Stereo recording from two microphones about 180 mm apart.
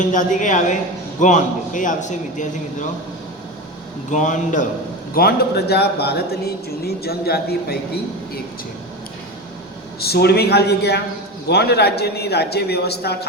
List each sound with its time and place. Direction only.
0.0 s a man's voice: 45° left (ahead or behind)
4.1 s a man's voice: 45° left (ahead or behind)
5.1 s a man's voice: 60° left (ahead or behind)
10.0 s a man's voice: 60° left (ahead or behind)